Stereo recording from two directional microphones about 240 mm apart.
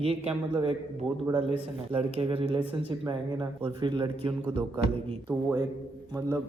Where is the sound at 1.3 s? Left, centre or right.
Right.